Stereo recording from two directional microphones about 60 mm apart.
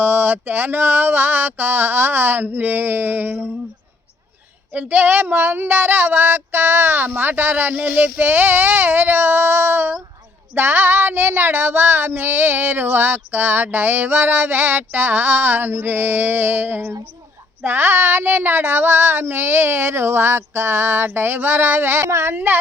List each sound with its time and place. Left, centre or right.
0.0 s speech: right
4.7 s speech: right